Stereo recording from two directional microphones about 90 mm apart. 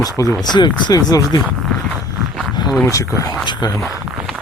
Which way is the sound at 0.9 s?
40° left (ahead or behind).